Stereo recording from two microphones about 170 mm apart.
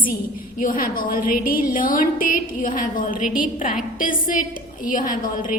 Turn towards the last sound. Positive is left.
turn(degrees=50)  # may be behind; listen again after turning